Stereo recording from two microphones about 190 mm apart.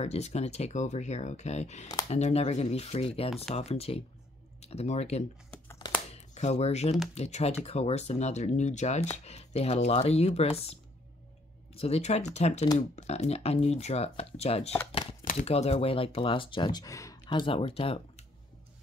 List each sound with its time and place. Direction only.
0.0 s speech: 35° left (ahead or behind)
5.7 s crumpling: 20° left (ahead or behind)
6.3 s speech: 35° left (ahead or behind)
11.7 s speech: 30° left (ahead or behind)
14.9 s shuffling cards: 30° left (ahead or behind)
15.2 s speech: 35° left (ahead or behind)